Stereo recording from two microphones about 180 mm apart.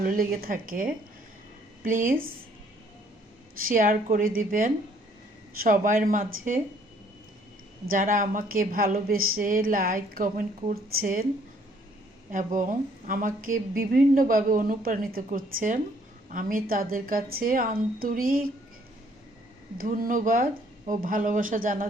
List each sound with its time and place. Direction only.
0.0 s speech: 50° right (ahead or behind)
3.6 s speech: 50° right (ahead or behind)
7.9 s speech: 50° right (ahead or behind)
12.3 s speech: 45° right (ahead or behind)
19.8 s speech: 50° right (ahead or behind)